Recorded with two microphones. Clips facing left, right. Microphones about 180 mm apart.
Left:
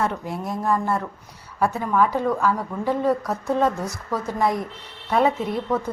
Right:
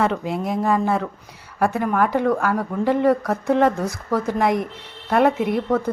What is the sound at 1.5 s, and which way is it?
A woman's voice, 70° right (ahead or behind).